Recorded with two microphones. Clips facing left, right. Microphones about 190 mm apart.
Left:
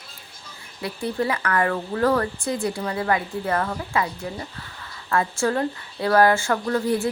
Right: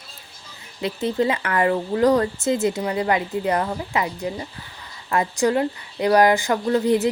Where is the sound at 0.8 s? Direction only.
20° right (ahead or behind).